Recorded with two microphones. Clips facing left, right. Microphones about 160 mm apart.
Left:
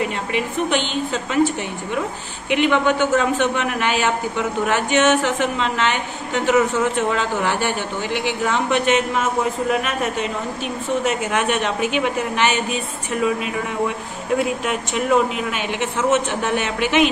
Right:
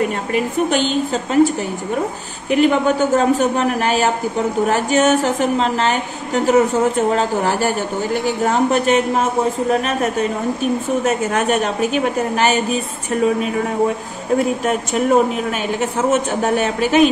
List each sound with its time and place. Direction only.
0.3 s speech: 40° right (ahead or behind)
2.5 s speech: 40° right (ahead or behind)